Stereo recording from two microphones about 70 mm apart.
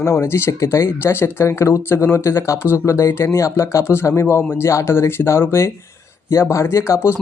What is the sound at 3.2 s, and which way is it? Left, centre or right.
A man's voice, left.